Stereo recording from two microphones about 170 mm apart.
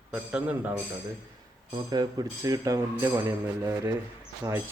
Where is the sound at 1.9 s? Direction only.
25° right (ahead or behind).